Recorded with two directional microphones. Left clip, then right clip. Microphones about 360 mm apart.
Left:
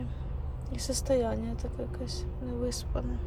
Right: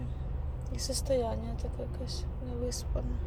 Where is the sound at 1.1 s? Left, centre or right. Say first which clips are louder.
Left 3 dB; left.